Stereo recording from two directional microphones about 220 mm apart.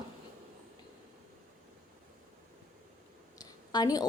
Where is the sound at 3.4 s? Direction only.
15° left (ahead or behind).